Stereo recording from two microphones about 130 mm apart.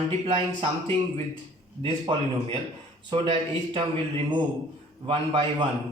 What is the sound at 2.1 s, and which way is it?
A man's voice, 40° right (ahead or behind).